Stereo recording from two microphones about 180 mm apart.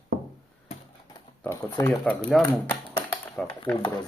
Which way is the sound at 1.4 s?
10° left (ahead or behind).